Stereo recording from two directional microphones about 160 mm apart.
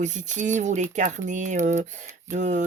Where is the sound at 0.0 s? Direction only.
50° right (ahead or behind).